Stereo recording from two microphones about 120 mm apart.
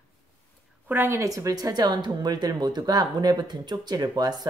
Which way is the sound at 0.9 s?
20° right (ahead or behind).